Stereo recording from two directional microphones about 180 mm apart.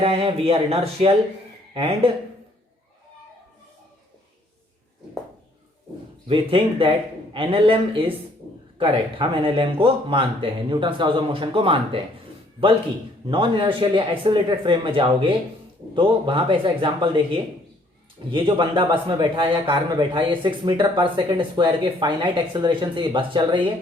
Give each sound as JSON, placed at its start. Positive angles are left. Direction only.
{"t": 0.0, "sound": "speech", "side_deg": -30}
{"t": 6.2, "sound": "a man's voice", "side_deg": -30}
{"t": 13.2, "sound": "a man's voice", "side_deg": -30}